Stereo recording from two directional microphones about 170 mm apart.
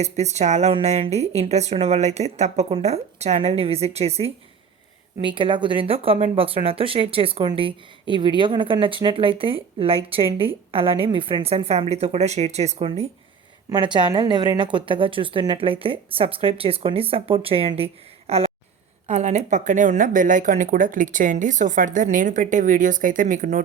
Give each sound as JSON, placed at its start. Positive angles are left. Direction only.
{"t": 0.0, "sound": "speech", "side_deg": -40}
{"t": 13.7, "sound": "speech", "side_deg": -25}